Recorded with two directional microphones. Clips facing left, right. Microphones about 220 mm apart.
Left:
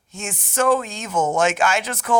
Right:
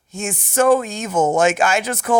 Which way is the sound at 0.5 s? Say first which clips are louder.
Right 4 dB; 45° right (ahead or behind).